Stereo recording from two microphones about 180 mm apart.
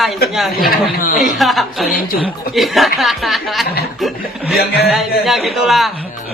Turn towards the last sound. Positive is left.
turn(degrees=0)  # may be behind; listen again after turning